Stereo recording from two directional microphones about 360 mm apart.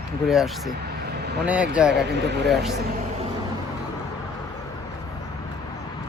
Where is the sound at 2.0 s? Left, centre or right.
Right.